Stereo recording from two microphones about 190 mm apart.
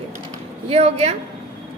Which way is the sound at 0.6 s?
35° right (ahead or behind).